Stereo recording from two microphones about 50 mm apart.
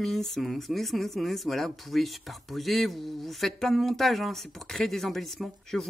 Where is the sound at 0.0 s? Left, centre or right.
Centre.